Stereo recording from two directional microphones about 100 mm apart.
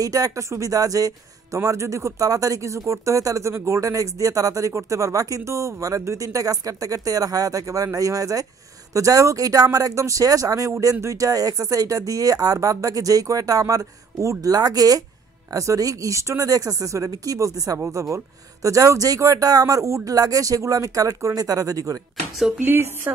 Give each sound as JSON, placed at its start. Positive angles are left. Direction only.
{"t": 0.0, "sound": "speech", "side_deg": -35}
{"t": 17.7, "sound": "a woman's voice", "side_deg": -25}
{"t": 18.1, "sound": "speech", "side_deg": -35}
{"t": 22.6, "sound": "a woman's voice", "side_deg": -20}